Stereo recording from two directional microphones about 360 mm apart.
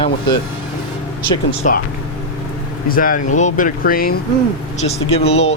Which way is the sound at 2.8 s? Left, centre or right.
Left.